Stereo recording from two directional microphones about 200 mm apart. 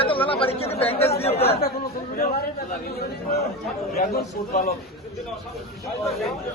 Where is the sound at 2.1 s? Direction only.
45° left (ahead or behind).